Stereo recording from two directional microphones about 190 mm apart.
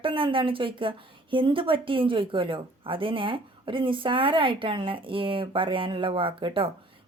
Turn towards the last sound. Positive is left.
turn(degrees=-30)  # may be behind; listen again after turning